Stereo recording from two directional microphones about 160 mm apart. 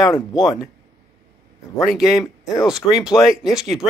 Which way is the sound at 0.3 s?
25° left (ahead or behind).